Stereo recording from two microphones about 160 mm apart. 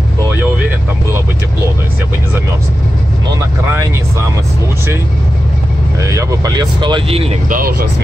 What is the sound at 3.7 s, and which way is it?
Speech, 15° right (ahead or behind).